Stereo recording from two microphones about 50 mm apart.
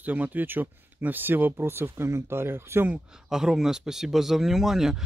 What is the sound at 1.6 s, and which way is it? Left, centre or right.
Speech, right.